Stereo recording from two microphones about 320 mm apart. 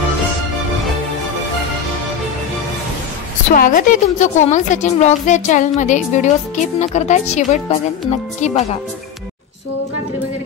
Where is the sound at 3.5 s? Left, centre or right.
Left.